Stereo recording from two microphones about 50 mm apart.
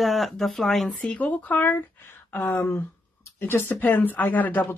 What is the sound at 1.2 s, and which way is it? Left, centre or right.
Speech, left.